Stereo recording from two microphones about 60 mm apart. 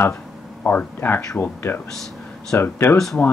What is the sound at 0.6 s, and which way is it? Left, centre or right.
Speech, left.